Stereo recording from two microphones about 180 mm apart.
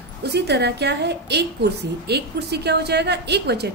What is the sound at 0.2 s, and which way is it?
A woman's voice, 65° right (ahead or behind).